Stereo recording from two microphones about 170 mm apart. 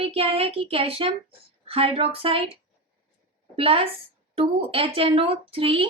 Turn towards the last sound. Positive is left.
turn(degrees=-35)  # may be behind; listen again after turning